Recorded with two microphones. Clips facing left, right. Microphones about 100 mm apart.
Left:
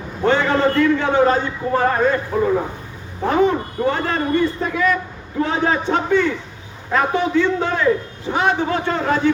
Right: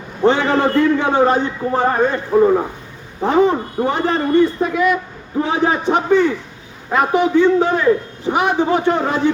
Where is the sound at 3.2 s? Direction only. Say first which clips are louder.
Right 2 dB; 20° right (ahead or behind).